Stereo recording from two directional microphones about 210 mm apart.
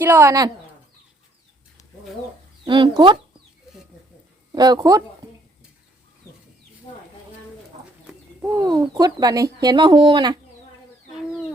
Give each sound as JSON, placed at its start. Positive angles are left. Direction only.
{"t": 0.0, "sound": "speech", "side_deg": -10}
{"t": 2.6, "sound": "speech", "side_deg": -25}
{"t": 4.5, "sound": "speech", "side_deg": -20}
{"t": 8.1, "sound": "bird", "side_deg": 0}
{"t": 8.6, "sound": "speech", "side_deg": -20}